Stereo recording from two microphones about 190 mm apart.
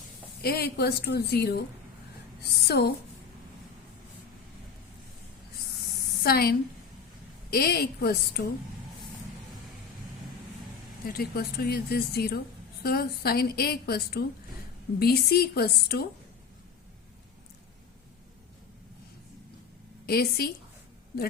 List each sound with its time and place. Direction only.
0.4 s a woman's voice: 55° left (ahead or behind)
6.2 s a woman's voice: 55° left (ahead or behind)
11.2 s a woman's voice: 55° left (ahead or behind)
20.1 s a woman's voice: 55° left (ahead or behind)